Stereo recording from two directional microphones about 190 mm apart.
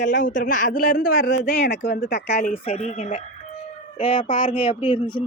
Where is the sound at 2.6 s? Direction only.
35° left (ahead or behind).